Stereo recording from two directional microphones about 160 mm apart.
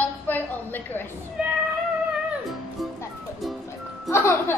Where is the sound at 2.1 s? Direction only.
5° right (ahead or behind).